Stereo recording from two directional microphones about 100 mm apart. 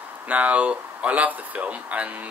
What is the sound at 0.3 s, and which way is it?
Speech, 15° right (ahead or behind).